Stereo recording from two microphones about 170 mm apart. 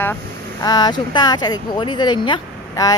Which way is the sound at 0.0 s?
10° left (ahead or behind).